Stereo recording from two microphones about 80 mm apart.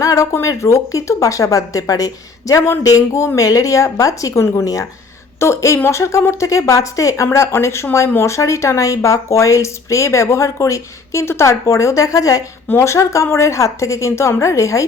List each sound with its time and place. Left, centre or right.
0.0 s speech: left
4.6 s speech: left